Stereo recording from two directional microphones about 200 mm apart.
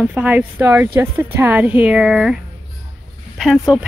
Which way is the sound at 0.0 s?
5° right (ahead or behind).